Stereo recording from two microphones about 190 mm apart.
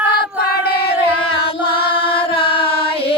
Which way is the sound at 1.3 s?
30° left (ahead or behind).